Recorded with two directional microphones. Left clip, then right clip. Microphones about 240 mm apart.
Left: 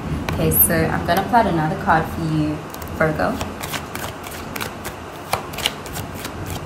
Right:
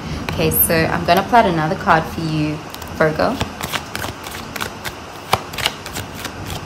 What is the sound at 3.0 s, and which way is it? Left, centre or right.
Speech, right.